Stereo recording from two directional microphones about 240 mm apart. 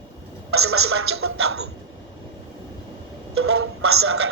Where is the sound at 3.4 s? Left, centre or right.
Right.